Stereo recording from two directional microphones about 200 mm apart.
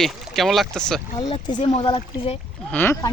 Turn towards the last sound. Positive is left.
turn(degrees=15)  # may be behind; listen again after turning